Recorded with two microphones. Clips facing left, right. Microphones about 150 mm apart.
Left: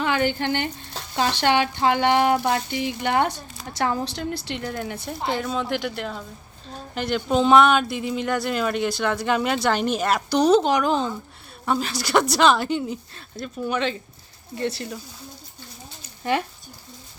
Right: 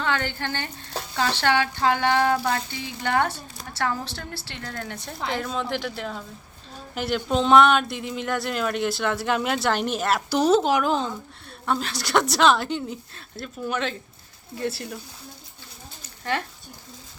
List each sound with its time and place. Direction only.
0.0 s a woman's voice: 15° left (ahead or behind); by 14.9 s centre (ahead or behind)
16.2 s a woman's voice: 15° left (ahead or behind)